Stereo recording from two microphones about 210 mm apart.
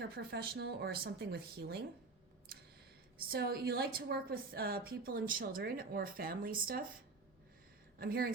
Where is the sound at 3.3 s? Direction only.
50° right (ahead or behind).